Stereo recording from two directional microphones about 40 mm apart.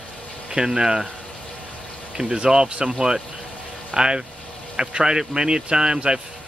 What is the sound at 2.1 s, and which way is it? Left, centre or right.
Speech, right.